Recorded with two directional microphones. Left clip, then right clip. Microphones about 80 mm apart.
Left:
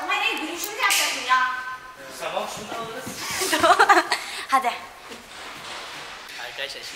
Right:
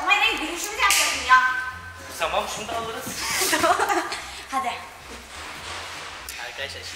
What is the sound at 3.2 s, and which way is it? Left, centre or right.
Chuckle, centre.